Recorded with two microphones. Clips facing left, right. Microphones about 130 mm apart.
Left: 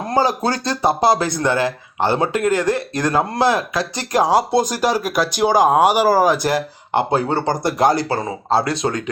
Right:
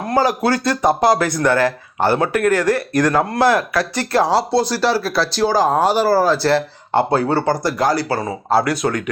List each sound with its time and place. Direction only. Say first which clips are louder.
0.1 s speech: right 2 dB; 25° left (ahead or behind)